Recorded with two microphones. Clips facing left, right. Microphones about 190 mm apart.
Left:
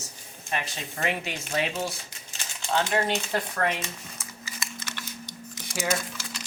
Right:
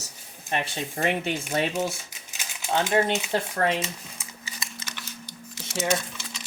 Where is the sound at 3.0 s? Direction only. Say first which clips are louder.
Right 1 dB; 5° right (ahead or behind).